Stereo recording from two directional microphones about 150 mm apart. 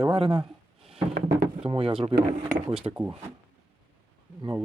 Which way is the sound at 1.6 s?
40° right (ahead or behind).